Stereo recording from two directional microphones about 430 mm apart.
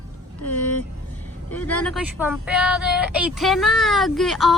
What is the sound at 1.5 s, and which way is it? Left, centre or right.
Speech, centre.